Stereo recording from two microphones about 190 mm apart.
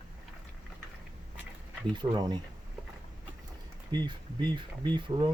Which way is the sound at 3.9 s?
25° right (ahead or behind).